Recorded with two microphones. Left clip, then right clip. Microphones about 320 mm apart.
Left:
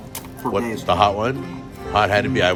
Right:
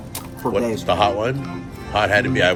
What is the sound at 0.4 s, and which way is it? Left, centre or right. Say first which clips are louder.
Speech: right 1 dB; centre.